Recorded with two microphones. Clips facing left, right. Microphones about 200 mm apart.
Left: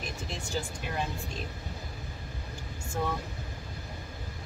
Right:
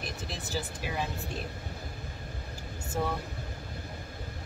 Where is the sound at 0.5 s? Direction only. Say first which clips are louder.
Even; 5° right (ahead or behind).